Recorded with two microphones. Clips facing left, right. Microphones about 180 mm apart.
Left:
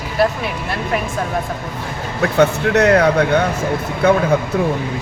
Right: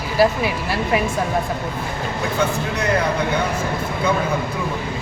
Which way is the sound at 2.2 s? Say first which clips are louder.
Left 8 dB; 70° left (ahead or behind).